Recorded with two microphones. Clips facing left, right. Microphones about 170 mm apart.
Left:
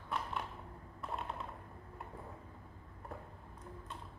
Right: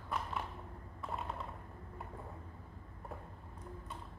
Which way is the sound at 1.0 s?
Centre (ahead or behind).